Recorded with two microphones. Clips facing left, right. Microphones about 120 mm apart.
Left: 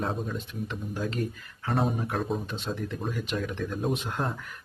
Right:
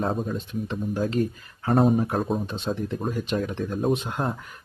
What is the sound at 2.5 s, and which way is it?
Speech, 30° right (ahead or behind).